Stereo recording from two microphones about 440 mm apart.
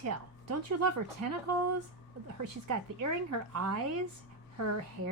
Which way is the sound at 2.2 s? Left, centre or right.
Right.